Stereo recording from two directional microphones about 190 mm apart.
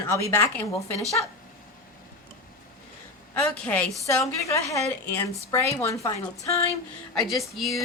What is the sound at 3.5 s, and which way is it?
A woman's voice, 5° left (ahead or behind).